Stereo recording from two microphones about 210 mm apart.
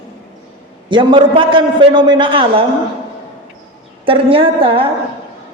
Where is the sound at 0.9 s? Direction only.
20° right (ahead or behind).